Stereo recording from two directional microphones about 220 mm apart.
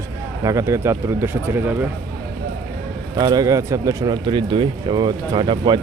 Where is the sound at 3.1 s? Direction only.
20° right (ahead or behind).